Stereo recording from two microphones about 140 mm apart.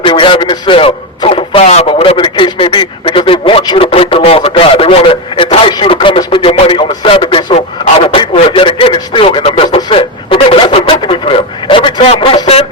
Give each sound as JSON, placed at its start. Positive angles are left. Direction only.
{"t": 0.0, "sound": "a man's voice", "side_deg": 40}
{"t": 3.6, "sound": "speech", "side_deg": 30}
{"t": 3.8, "sound": "speech", "side_deg": 40}
{"t": 9.4, "sound": "a sound", "side_deg": 40}